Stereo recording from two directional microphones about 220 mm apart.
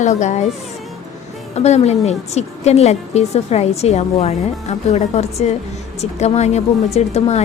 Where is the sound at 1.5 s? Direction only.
30° left (ahead or behind).